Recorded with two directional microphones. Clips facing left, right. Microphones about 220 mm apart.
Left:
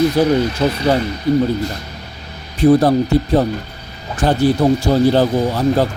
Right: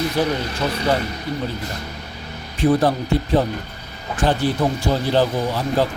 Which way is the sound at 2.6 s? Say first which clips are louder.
Left 5 dB; 40° left (ahead or behind).